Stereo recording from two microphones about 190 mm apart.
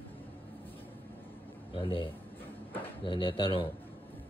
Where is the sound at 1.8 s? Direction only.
25° left (ahead or behind).